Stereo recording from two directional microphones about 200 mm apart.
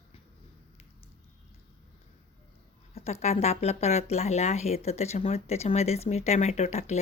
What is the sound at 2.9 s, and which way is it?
Speech, 30° left (ahead or behind).